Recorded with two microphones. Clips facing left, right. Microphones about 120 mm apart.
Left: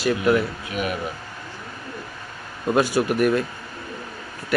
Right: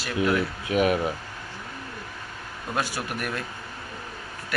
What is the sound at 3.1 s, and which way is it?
Speech, 5° left (ahead or behind).